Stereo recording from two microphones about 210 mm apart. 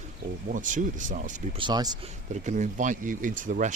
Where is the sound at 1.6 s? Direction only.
20° right (ahead or behind).